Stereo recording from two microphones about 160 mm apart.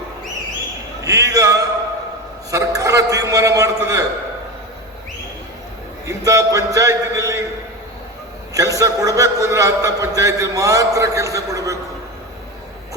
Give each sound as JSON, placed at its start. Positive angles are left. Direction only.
{"t": 1.0, "sound": "a sound", "side_deg": -20}
{"t": 2.5, "sound": "a man's voice", "side_deg": -20}
{"t": 6.1, "sound": "a man's voice", "side_deg": -20}
{"t": 8.5, "sound": "a man's voice", "side_deg": -20}